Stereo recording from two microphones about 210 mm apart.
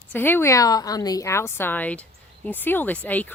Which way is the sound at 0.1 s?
10° left (ahead or behind).